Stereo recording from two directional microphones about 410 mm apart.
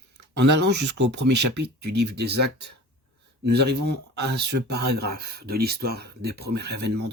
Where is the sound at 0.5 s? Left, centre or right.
Right.